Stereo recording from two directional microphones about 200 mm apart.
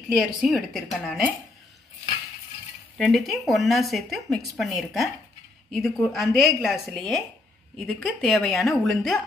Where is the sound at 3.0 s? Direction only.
Centre (ahead or behind).